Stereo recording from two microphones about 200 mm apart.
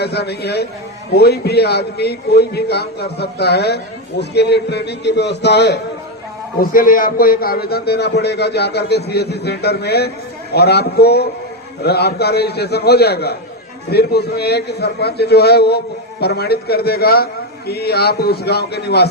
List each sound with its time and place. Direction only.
0.0 s a man's voice: 55° left (ahead or behind)
6.6 s a man's voice: 45° left (ahead or behind)